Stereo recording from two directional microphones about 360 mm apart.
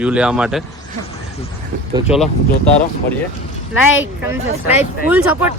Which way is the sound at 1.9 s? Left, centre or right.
Centre.